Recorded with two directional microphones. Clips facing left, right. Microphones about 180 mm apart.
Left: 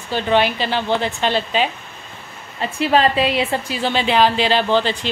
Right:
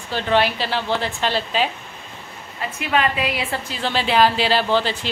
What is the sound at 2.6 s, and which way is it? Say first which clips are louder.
Speech: left 5 dB; 30° left (ahead or behind).